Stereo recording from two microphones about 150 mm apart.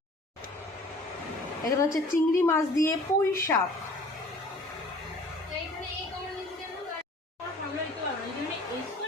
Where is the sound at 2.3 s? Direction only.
20° left (ahead or behind).